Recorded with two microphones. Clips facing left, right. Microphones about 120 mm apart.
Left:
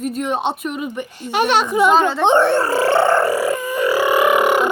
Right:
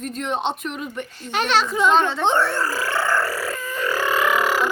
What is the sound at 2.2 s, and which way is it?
Roar, 20° left (ahead or behind).